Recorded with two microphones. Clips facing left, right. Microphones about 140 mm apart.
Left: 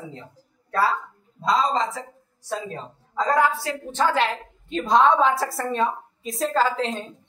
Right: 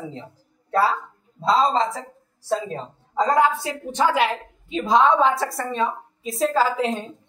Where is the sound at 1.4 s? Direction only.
30° right (ahead or behind).